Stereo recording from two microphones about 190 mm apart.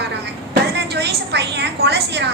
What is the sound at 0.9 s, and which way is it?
A woman's voice, 60° right (ahead or behind).